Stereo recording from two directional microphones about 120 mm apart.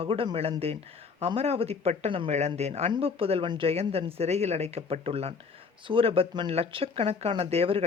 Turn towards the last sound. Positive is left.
turn(degrees=-55)  # may be behind; listen again after turning